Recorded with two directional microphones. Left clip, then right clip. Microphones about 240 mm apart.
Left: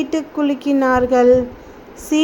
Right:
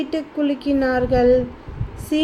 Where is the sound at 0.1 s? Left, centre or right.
Centre.